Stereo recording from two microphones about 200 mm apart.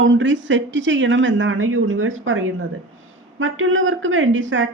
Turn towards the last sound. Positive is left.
turn(degrees=-75)  # may be behind; listen again after turning